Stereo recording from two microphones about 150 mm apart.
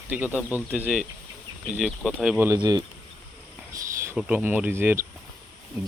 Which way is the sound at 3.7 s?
20° right (ahead or behind).